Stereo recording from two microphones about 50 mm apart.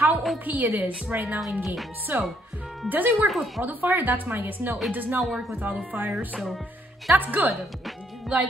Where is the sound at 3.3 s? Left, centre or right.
Centre.